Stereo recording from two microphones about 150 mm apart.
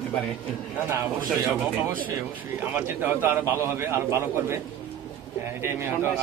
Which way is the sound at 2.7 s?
15° right (ahead or behind).